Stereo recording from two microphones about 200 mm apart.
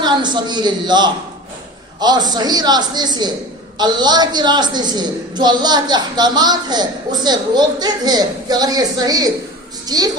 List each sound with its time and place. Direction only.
0.0 s a woman's voice: 20° right (ahead or behind)